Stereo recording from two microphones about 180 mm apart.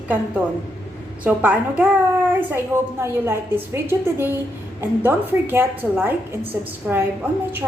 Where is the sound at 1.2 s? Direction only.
10° right (ahead or behind).